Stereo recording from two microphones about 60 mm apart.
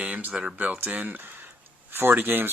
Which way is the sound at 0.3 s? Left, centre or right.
Right.